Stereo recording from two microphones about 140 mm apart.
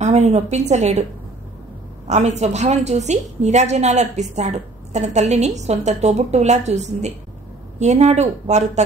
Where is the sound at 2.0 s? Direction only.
55° right (ahead or behind).